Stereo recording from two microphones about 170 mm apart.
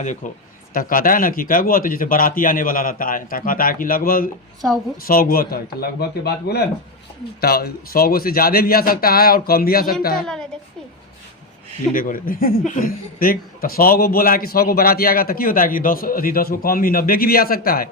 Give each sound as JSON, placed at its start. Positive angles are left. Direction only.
{"t": 0.0, "sound": "a man's voice", "side_deg": 45}
{"t": 11.9, "sound": "a man's voice", "side_deg": 55}